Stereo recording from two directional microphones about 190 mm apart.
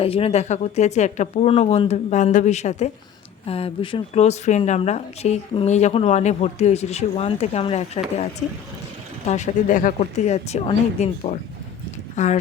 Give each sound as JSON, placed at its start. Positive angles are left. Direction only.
{"t": 0.0, "sound": "speech", "side_deg": 30}
{"t": 9.2, "sound": "speech", "side_deg": 40}